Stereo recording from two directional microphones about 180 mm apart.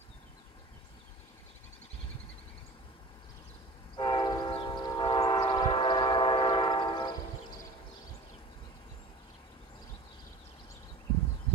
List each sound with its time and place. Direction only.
3.9 s train: 25° left (ahead or behind)